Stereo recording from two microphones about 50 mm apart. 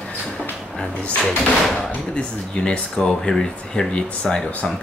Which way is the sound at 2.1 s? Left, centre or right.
Left.